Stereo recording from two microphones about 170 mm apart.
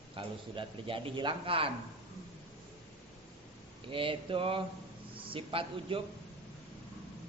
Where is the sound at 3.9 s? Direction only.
30° right (ahead or behind).